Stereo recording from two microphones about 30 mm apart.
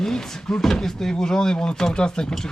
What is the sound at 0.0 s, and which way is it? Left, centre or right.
Speech, centre.